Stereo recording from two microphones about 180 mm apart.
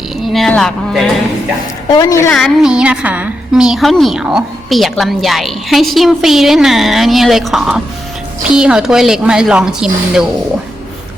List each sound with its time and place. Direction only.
0.3 s a woman's voice: 5° left (ahead or behind)
1.9 s a woman's voice: 20° left (ahead or behind)
2.3 s a woman's voice: centre (ahead or behind)